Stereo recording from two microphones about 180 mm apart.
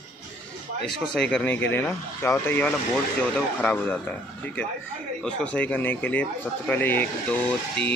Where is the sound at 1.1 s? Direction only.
5° left (ahead or behind).